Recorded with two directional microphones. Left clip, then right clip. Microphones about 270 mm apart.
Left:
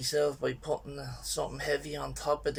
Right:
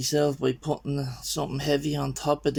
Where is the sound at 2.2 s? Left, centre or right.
Right.